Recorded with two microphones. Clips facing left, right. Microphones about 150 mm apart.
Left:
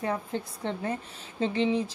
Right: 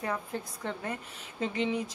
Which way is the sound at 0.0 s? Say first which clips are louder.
Left 3 dB; 30° left (ahead or behind).